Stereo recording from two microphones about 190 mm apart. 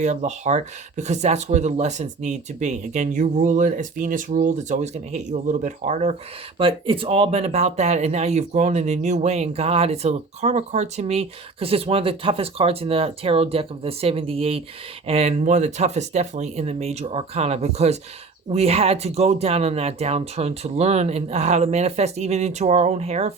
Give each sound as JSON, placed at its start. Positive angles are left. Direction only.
{"t": 0.0, "sound": "speech", "side_deg": -40}